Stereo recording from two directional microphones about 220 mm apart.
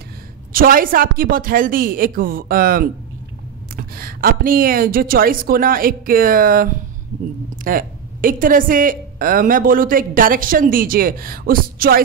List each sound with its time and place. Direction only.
0.5 s a woman's voice: 40° right (ahead or behind)